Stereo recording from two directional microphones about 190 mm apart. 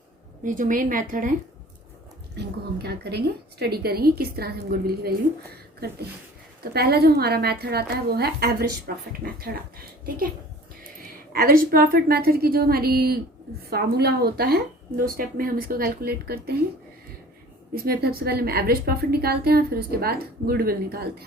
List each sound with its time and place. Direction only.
0.4 s a woman's voice: 45° right (ahead or behind)
2.3 s a woman's voice: 60° right (ahead or behind)
11.3 s a woman's voice: 50° right (ahead or behind)
17.7 s a woman's voice: 55° right (ahead or behind)